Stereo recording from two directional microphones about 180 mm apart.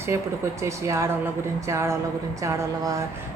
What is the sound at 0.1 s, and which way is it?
A woman's voice, 15° right (ahead or behind).